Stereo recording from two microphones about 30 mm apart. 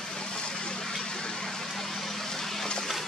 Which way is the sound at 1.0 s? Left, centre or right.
Left.